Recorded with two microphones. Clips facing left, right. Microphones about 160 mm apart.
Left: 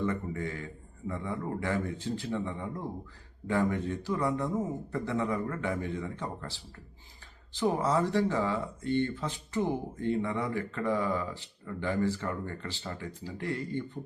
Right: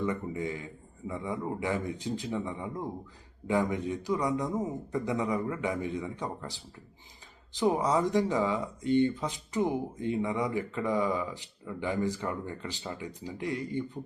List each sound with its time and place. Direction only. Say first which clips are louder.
0.0 s speech: right 1 dB; 15° right (ahead or behind)